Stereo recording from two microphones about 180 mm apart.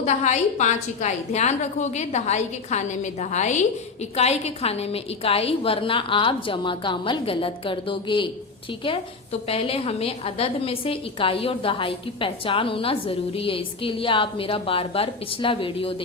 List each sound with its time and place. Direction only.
0.0 s a woman's voice: 40° left (ahead or behind)
9.5 s a woman's voice: 30° left (ahead or behind)